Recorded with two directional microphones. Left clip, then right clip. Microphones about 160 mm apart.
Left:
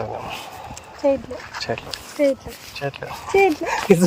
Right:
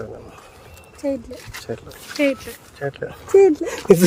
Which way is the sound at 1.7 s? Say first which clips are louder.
Left 3 dB; 25° right (ahead or behind).